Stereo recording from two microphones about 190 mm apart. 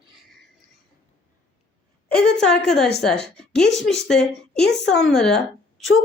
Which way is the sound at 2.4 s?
5° left (ahead or behind).